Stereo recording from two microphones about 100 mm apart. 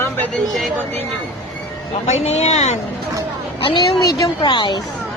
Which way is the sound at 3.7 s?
40° left (ahead or behind).